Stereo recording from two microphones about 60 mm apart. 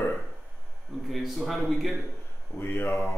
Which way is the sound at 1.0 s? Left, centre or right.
Centre.